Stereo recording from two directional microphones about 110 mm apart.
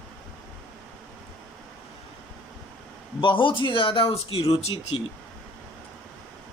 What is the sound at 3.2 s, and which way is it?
Speech, 50° left (ahead or behind).